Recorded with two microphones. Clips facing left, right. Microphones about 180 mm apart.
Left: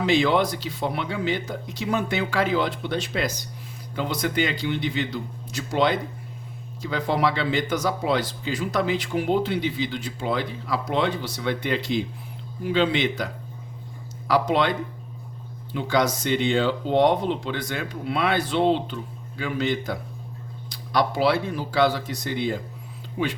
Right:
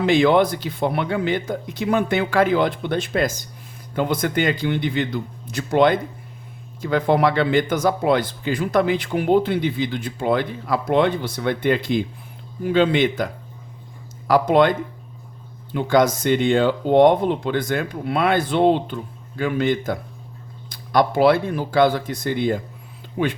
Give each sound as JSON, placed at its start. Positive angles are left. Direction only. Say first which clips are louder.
{"t": 0.0, "sound": "speech", "louder": "right 5 dB", "side_deg": -55}